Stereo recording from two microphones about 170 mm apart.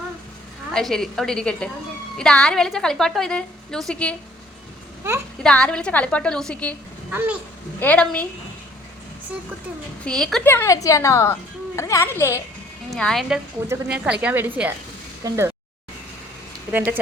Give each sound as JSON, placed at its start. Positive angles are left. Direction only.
{"t": 0.7, "sound": "a woman's voice", "side_deg": 0}
{"t": 5.4, "sound": "a woman's voice", "side_deg": 5}
{"t": 7.1, "sound": "speech", "side_deg": -10}
{"t": 7.8, "sound": "a woman's voice", "side_deg": 10}
{"t": 10.0, "sound": "a woman's voice", "side_deg": 5}
{"t": 10.4, "sound": "a woman's voice", "side_deg": 15}
{"t": 12.9, "sound": "a woman's voice", "side_deg": 0}